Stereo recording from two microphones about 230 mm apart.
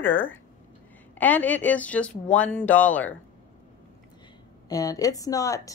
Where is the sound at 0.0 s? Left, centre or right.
Centre.